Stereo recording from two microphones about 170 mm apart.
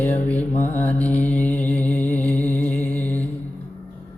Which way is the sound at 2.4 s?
10° left (ahead or behind).